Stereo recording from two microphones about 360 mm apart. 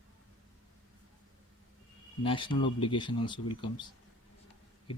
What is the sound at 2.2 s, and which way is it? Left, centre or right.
Speech, centre.